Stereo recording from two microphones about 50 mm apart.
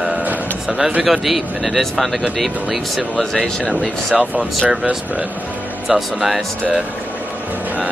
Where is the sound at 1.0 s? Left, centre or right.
Centre.